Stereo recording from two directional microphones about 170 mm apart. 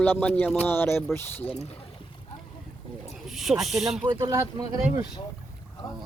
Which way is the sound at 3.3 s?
Centre (ahead or behind).